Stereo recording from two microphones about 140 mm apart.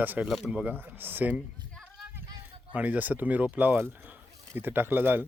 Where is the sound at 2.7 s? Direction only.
10° right (ahead or behind).